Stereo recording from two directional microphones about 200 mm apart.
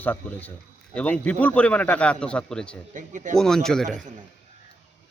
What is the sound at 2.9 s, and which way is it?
Speech, 40° right (ahead or behind).